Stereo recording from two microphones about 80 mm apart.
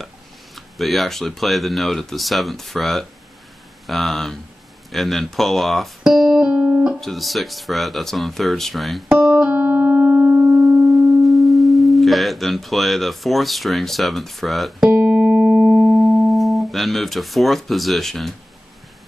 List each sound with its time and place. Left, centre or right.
0.6 s speech: centre
6.0 s music: centre
7.0 s a sound: centre; by 10.6 s right
11.2 s sine wave: centre